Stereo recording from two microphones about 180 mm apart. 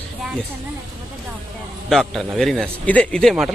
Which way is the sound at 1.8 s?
Centre (ahead or behind).